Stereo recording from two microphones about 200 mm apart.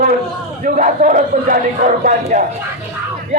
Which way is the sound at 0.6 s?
40° right (ahead or behind).